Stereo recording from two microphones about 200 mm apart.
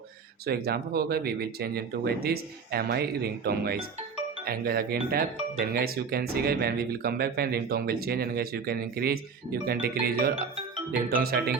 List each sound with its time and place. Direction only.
0.4 s speech: 50° right (ahead or behind)